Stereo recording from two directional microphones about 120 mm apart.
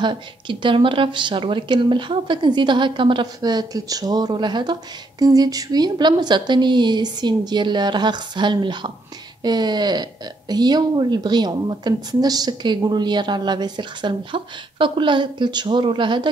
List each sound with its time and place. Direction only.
0.0 s a woman's voice: 40° right (ahead or behind)